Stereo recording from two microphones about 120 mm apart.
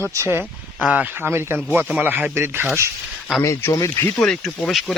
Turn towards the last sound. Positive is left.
turn(degrees=0)  # may be behind; listen again after turning